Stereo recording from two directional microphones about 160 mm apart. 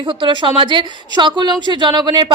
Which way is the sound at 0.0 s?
30° right (ahead or behind).